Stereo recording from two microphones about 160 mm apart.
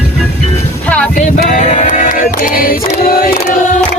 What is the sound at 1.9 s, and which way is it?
Music, 55° left (ahead or behind).